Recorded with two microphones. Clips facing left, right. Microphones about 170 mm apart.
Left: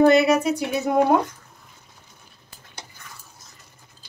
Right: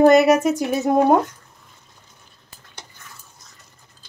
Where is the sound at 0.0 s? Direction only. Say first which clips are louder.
Right 3 dB; 45° right (ahead or behind).